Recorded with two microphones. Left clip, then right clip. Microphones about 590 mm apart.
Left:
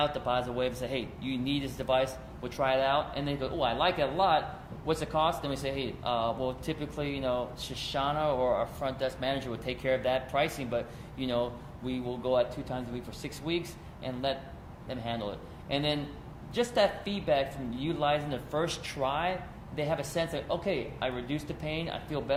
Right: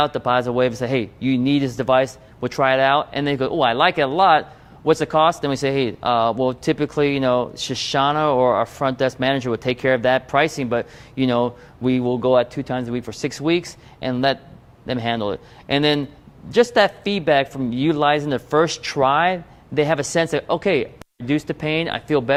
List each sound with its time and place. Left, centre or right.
0.0 s speech: right